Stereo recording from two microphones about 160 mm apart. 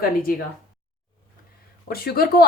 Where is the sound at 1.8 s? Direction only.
70° left (ahead or behind).